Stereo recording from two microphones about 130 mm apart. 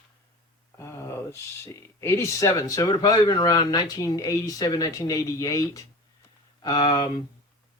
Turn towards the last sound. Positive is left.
turn(degrees=35)  # may be behind; listen again after turning